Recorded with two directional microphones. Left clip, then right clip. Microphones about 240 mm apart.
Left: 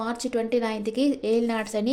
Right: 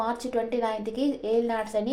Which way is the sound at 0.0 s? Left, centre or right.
Left.